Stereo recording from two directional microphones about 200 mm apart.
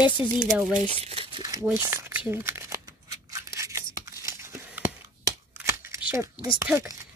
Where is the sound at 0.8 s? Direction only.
30° right (ahead or behind).